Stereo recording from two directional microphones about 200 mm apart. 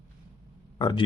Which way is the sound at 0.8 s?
20° left (ahead or behind).